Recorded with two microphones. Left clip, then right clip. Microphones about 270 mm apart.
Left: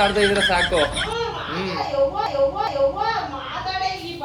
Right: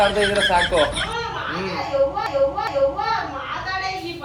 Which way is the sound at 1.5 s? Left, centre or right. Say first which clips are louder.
Even; centre.